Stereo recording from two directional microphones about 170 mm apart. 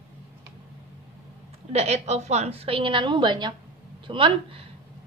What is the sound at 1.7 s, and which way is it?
A woman's voice, 40° right (ahead or behind).